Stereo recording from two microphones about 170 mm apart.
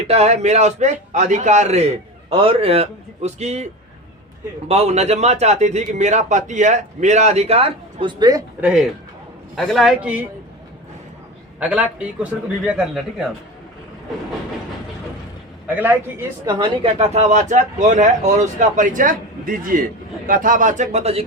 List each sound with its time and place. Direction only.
0.1 s a man's voice: 40° right (ahead or behind)
4.7 s a man's voice: 40° right (ahead or behind)
8.6 s a man's voice: 5° right (ahead or behind)
11.6 s speech: 10° right (ahead or behind)
15.6 s speech: 10° right (ahead or behind)
16.6 s speech: 30° right (ahead or behind)